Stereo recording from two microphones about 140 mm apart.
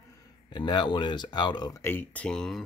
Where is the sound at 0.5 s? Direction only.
30° left (ahead or behind).